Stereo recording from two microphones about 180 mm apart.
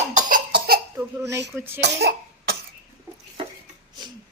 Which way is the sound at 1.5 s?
15° right (ahead or behind).